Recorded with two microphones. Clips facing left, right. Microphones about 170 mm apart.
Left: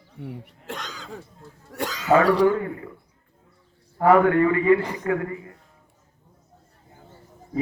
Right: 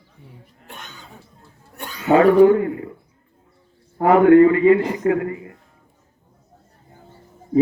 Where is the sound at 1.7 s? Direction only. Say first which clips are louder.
Left 6 dB; 90° left.